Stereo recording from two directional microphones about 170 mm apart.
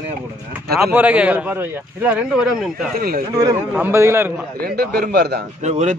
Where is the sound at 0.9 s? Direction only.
10° right (ahead or behind).